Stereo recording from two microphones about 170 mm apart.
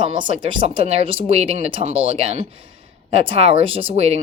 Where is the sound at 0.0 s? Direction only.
30° right (ahead or behind).